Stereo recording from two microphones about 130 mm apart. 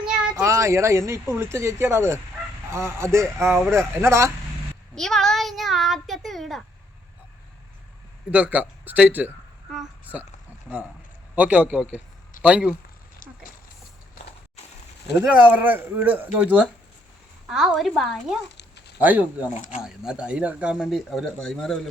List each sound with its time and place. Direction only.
0.0 s a sound: 5° right (ahead or behind)
0.4 s speech: 20° right (ahead or behind)
4.9 s a child's voice: 5° left (ahead or behind)
8.3 s speech: 10° right (ahead or behind)
11.3 s speech: 10° right (ahead or behind)
15.2 s speech: 10° right (ahead or behind)
19.8 s speech: 5° right (ahead or behind)